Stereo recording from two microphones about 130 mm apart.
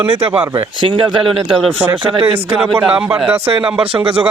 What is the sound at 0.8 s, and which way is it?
Speech, 40° right (ahead or behind).